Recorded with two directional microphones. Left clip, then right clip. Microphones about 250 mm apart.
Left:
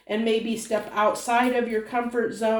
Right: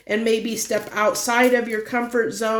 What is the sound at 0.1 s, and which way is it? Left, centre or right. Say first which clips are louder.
A woman's voice: right 4 dB; right.